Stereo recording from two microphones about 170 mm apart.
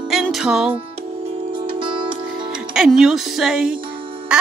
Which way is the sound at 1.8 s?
30° right (ahead or behind).